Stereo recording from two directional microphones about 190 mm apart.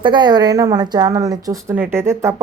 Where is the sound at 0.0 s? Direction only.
25° right (ahead or behind).